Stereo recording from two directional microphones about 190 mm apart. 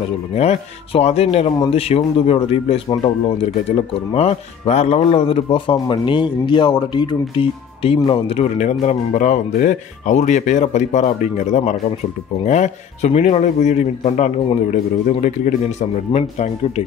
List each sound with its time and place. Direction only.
0.4 s speech: 35° left (ahead or behind)